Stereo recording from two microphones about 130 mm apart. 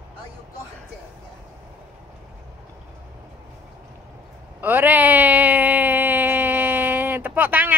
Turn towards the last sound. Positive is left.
turn(degrees=-15)  # may be behind; listen again after turning